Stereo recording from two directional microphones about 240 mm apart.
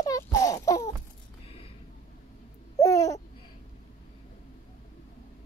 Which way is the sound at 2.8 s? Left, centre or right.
Centre.